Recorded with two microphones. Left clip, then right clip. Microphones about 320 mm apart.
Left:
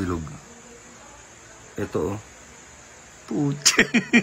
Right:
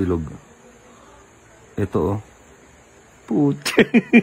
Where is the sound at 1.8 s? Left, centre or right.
Centre.